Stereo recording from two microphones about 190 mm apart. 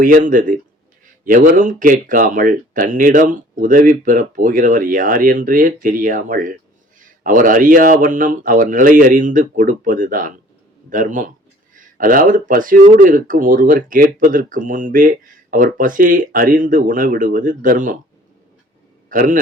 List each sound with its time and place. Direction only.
0.0 s a man's voice: 45° right (ahead or behind)
19.0 s a man's voice: 45° right (ahead or behind)